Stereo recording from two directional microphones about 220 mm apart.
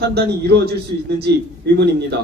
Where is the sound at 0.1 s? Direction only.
45° right (ahead or behind).